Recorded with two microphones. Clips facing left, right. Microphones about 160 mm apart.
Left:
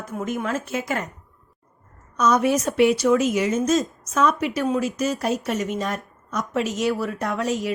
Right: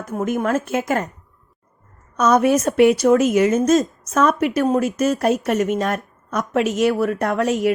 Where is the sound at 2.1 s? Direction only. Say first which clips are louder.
Right 4 dB; 55° right (ahead or behind).